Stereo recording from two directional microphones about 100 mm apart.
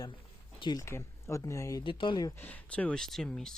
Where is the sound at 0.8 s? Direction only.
25° left (ahead or behind).